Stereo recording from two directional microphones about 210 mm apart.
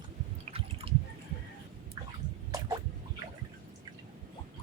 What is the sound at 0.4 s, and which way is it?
Drip, 25° right (ahead or behind).